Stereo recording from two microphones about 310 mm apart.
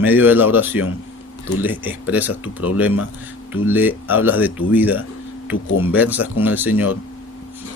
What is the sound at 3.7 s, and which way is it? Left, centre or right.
Speech, centre.